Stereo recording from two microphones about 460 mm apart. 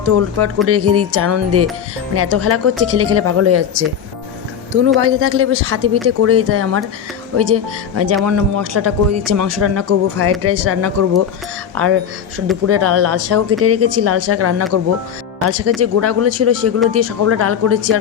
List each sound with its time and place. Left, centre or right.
0.0 s speech: right
4.9 s speech: right